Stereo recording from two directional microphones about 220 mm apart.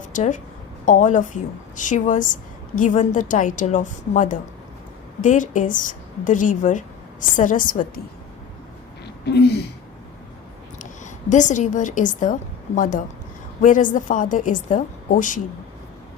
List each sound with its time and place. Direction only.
0.1 s a woman's voice: 35° left (ahead or behind)
9.2 s speech: 50° left (ahead or behind)
11.0 s a woman's voice: 35° left (ahead or behind)